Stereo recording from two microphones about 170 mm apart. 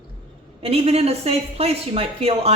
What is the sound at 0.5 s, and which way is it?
A man's voice, 35° right (ahead or behind).